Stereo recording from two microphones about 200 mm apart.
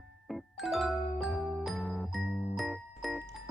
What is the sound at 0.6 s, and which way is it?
Music, centre (ahead or behind).